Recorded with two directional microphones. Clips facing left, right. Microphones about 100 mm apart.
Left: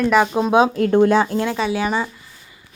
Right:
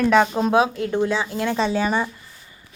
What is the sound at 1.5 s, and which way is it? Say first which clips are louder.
Speech: even; 10° left (ahead or behind).